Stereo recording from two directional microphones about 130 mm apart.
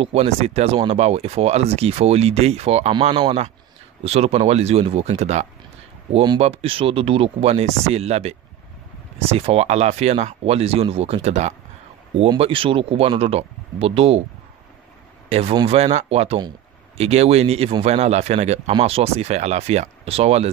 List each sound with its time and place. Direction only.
0.0 s speech: 55° right (ahead or behind)
6.4 s speech: 50° right (ahead or behind)
12.4 s speech: 45° right (ahead or behind)
15.2 s speech: 55° right (ahead or behind)